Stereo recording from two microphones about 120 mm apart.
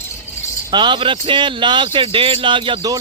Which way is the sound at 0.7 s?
40° right (ahead or behind).